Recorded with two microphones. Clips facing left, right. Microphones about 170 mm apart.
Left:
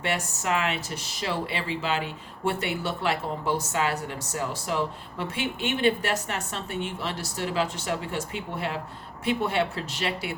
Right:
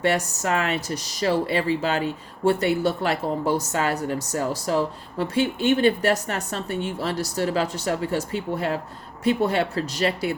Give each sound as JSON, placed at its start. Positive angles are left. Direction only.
{"t": 0.0, "sound": "speech", "side_deg": -40}